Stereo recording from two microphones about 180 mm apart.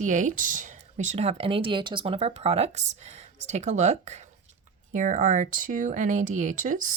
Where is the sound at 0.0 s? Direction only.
45° right (ahead or behind).